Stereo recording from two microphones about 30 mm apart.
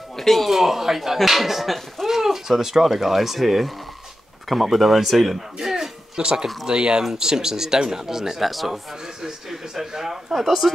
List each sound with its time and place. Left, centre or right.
0.1 s speech: centre
0.5 s speech: centre
5.6 s a sound: centre
6.7 s speech: right
8.4 s speech: centre